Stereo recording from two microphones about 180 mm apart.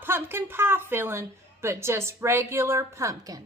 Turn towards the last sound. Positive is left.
turn(degrees=-20)  # may be behind; listen again after turning